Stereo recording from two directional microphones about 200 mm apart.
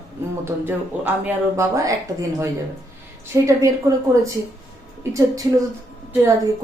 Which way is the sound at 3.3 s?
15° right (ahead or behind).